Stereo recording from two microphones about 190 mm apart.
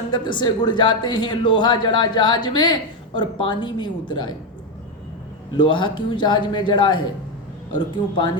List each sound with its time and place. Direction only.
0.1 s speech: 25° left (ahead or behind)
5.5 s speech: 25° left (ahead or behind)